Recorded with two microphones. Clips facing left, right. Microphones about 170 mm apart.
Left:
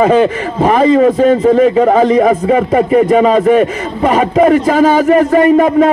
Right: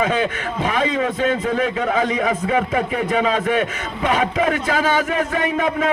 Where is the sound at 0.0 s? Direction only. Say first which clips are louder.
Left 11 dB; 55° left (ahead or behind).